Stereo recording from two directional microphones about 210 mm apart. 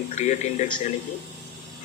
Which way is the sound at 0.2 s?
35° left (ahead or behind).